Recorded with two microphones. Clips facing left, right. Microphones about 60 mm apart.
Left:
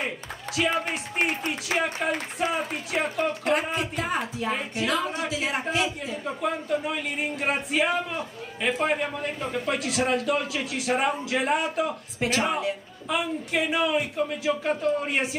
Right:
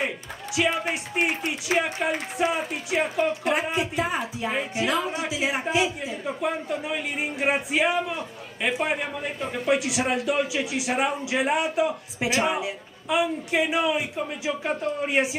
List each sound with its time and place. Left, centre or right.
0.6 s speech: centre